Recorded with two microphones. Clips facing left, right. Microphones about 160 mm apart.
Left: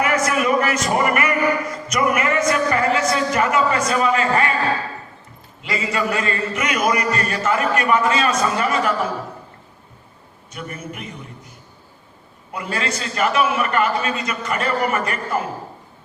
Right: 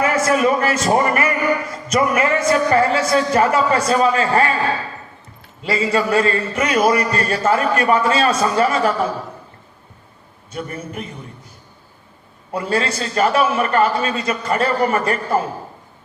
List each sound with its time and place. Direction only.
0.0 s a man's voice: 30° right (ahead or behind)
5.6 s a man's voice: 30° right (ahead or behind)
10.5 s a man's voice: 30° right (ahead or behind)
12.5 s a man's voice: 30° right (ahead or behind)